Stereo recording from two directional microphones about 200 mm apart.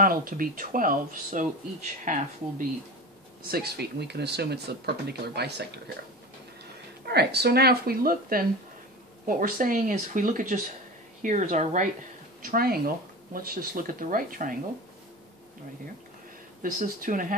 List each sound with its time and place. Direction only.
0.0 s speech: 45° right (ahead or behind)
3.4 s speech: 50° right (ahead or behind)
7.1 s speech: 55° right (ahead or behind); by 11.9 s 40° right (ahead or behind)
12.4 s speech: 50° right (ahead or behind)
16.8 s speech: 40° right (ahead or behind)